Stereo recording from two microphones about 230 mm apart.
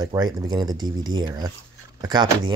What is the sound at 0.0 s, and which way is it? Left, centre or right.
Speech, centre.